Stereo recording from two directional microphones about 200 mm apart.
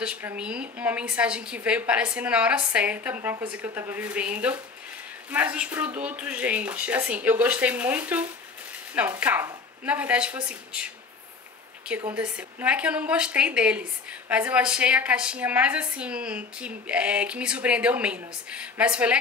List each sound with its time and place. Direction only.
0.0 s a woman's voice: 10° right (ahead or behind)
11.9 s a woman's voice: 5° right (ahead or behind)